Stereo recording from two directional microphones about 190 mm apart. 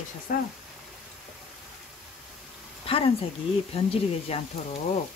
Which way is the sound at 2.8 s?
30° left (ahead or behind).